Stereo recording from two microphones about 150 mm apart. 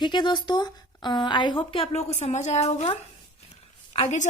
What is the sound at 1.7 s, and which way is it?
A woman's voice, 40° left (ahead or behind).